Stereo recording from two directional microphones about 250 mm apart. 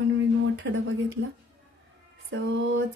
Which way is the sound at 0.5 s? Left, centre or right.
Right.